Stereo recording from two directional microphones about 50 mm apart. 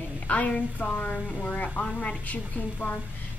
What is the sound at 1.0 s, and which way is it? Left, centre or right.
A woman's voice, left.